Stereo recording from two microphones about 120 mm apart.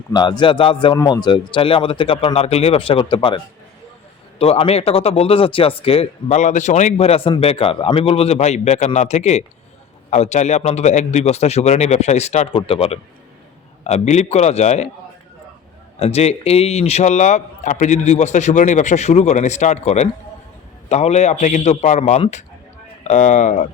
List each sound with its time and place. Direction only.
0.1 s speech: 35° left (ahead or behind)
4.4 s speech: 55° left (ahead or behind)
6.3 s a man's voice: 85° left
6.9 s a man's voice: 55° left (ahead or behind)
12.5 s speech: 50° left (ahead or behind)
13.8 s a man's voice: 65° left (ahead or behind)
16.0 s a man's voice: 60° left (ahead or behind)
23.0 s speech: 80° left